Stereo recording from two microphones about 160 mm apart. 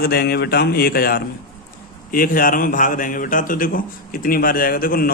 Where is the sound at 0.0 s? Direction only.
80° left.